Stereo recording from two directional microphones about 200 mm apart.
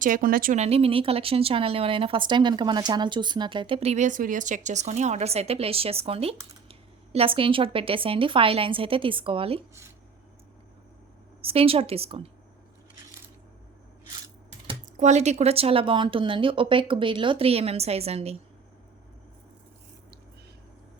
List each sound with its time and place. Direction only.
0.0 s speech: 45° right (ahead or behind); by 9.6 s 25° right (ahead or behind)
11.4 s speech: 30° right (ahead or behind)
14.9 s speech: 35° right (ahead or behind)